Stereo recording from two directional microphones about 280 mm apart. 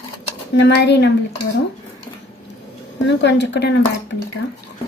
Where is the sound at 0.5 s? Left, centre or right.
Left.